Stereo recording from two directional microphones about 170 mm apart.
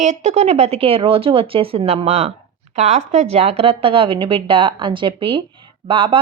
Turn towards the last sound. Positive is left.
turn(degrees=-30)  # may be behind; listen again after turning